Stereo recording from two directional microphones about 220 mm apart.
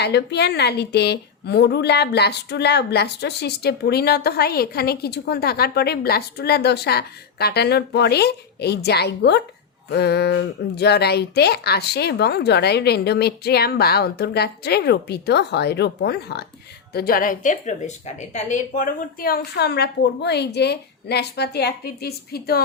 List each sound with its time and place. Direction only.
0.0 s a woman's voice: 50° left (ahead or behind)